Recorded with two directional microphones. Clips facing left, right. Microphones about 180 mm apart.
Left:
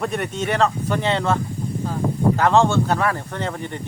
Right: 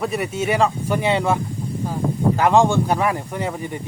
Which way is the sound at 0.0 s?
5° right (ahead or behind).